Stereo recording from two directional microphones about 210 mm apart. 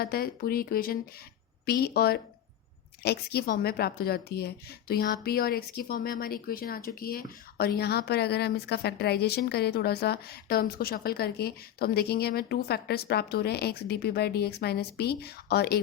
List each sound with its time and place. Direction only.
0.0 s speech: 45° left (ahead or behind)